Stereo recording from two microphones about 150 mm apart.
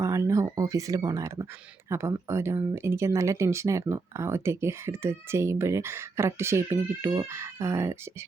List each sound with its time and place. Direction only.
0.0 s speech: 20° right (ahead or behind)